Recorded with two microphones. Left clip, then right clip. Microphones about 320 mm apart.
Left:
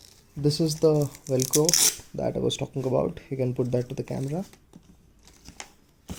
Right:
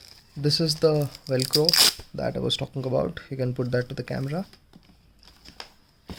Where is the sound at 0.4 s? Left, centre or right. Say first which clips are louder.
Even; centre.